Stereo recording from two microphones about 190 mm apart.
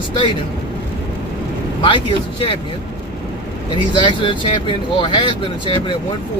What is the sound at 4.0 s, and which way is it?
Speech, 25° left (ahead or behind).